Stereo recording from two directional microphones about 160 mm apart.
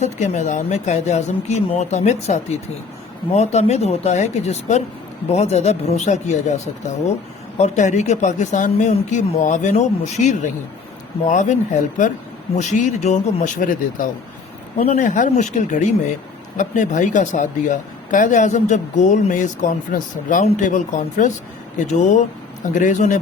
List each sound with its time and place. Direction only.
0.0 s speech: 45° left (ahead or behind)